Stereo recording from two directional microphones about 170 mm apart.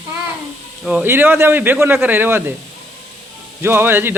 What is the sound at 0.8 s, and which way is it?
Speech, 10° right (ahead or behind).